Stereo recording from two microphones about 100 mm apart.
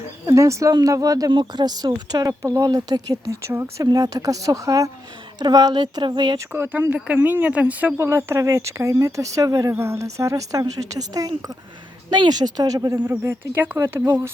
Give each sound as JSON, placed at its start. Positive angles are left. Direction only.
{"t": 0.3, "sound": "speech", "side_deg": -30}
{"t": 1.3, "sound": "speech", "side_deg": -50}
{"t": 3.4, "sound": "speech", "side_deg": -25}
{"t": 3.9, "sound": "speech", "side_deg": -35}
{"t": 6.5, "sound": "speech", "side_deg": -20}
{"t": 13.1, "sound": "speech", "side_deg": -25}